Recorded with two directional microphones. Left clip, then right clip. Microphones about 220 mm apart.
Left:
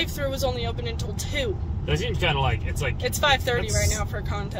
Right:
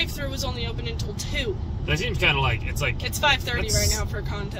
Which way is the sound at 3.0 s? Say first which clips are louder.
Left 2 dB; 25° left (ahead or behind).